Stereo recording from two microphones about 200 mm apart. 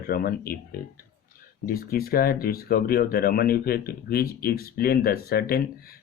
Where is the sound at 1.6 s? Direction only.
50° left (ahead or behind).